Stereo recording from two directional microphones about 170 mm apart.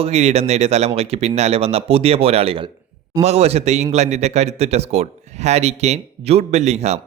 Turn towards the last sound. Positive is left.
turn(degrees=-40)  # may be behind; listen again after turning